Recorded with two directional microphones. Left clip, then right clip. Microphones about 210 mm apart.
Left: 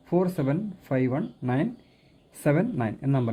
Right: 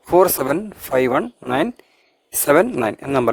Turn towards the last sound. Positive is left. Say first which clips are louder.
# right 11 dB
turn(degrees=-45)  # may be behind; listen again after turning